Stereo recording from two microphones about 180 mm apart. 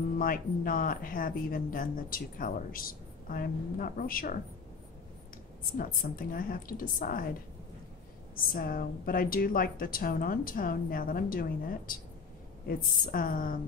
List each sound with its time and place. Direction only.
0.2 s speech: 50° left (ahead or behind)
5.8 s speech: 50° left (ahead or behind)
8.5 s speech: 55° left (ahead or behind)